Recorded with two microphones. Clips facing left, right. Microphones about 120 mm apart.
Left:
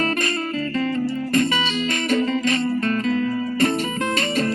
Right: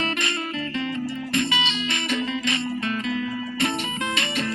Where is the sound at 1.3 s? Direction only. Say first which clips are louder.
Left 4 dB; 45° left (ahead or behind).